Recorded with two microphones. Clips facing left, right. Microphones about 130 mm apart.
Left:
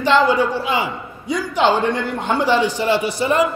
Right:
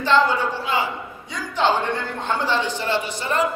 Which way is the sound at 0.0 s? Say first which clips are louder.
Left 4 dB; 15° left (ahead or behind).